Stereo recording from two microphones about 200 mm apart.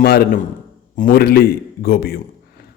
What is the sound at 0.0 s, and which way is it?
A man's voice, 50° left (ahead or behind).